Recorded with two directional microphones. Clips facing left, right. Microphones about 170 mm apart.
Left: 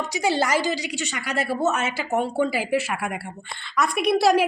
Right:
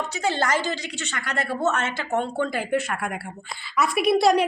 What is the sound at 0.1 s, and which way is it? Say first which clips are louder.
A woman's voice: left 3 dB; 10° left (ahead or behind).